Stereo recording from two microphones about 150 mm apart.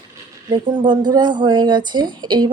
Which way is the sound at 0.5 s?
30° right (ahead or behind).